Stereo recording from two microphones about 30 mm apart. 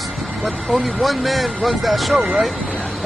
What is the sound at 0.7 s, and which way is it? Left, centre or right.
Speech, centre.